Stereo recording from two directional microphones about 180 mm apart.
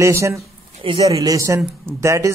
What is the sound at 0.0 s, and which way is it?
A man's voice, 15° right (ahead or behind).